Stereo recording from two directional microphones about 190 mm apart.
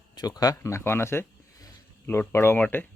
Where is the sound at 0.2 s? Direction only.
20° left (ahead or behind).